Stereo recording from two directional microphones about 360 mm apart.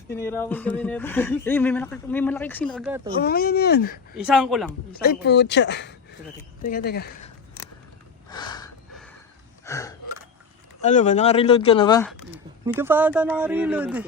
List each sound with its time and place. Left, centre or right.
0.1 s speech: centre
3.1 s speech: left
4.2 s speech: centre
5.0 s speech: left
8.3 s a sound: centre
9.6 s gasp: centre
10.8 s speech: centre
12.6 s speech: centre